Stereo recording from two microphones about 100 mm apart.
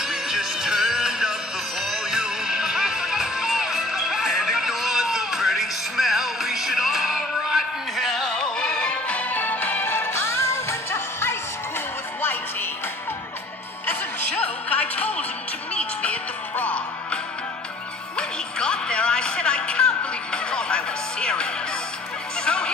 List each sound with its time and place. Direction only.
0.0 s music: 5° right (ahead or behind); by 11.3 s 25° left (ahead or behind)
14.7 s music: 15° left (ahead or behind)